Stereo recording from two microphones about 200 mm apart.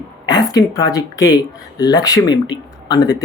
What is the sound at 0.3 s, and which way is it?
A woman's voice, 20° left (ahead or behind).